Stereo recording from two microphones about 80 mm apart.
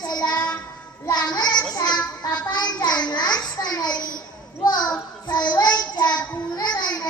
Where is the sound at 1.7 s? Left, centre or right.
Left.